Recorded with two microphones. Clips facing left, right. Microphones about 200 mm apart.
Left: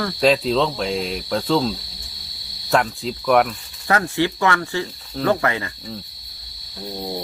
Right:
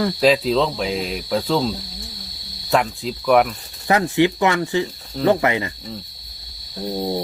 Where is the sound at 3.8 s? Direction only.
20° right (ahead or behind).